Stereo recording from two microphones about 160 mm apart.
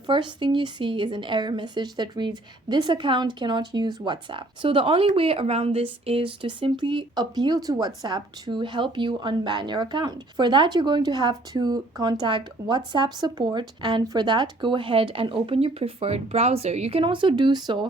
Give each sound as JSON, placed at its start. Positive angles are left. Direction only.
{"t": 0.1, "sound": "a woman's voice", "side_deg": -30}